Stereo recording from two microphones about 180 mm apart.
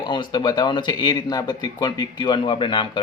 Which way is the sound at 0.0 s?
25° left (ahead or behind).